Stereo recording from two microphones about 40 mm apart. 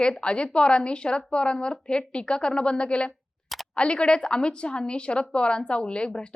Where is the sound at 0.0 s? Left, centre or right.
Left.